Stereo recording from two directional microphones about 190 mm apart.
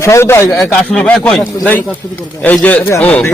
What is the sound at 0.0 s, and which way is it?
A man's voice, 15° left (ahead or behind).